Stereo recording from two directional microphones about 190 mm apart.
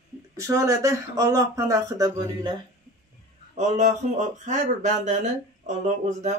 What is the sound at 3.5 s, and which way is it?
Speech, 35° right (ahead or behind).